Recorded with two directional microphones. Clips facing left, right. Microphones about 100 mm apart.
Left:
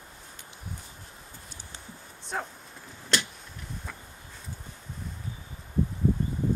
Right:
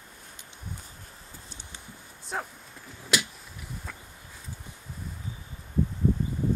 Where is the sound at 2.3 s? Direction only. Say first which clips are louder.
Even; 5° right (ahead or behind).